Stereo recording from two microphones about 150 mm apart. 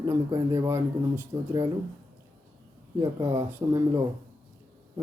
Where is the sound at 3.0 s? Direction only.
20° right (ahead or behind).